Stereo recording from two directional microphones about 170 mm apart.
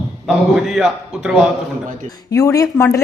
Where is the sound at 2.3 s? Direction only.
20° left (ahead or behind).